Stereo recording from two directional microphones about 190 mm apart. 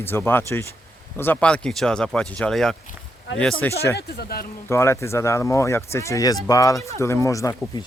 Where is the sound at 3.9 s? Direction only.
60° left (ahead or behind).